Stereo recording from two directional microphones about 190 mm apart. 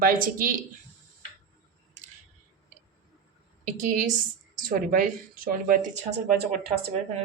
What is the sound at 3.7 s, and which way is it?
Speech, 45° right (ahead or behind).